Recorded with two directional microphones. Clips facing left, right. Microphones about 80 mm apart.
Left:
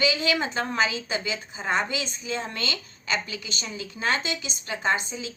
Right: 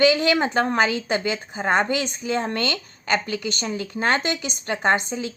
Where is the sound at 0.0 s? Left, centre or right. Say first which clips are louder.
Right 7 dB; right.